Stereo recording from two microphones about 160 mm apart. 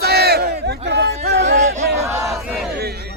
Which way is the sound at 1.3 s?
85° right.